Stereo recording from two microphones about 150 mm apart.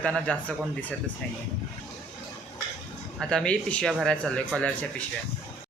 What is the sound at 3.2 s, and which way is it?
Speech, 5° left (ahead or behind).